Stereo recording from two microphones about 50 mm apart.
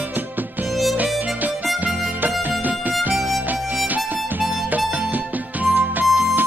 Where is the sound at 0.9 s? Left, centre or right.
Right.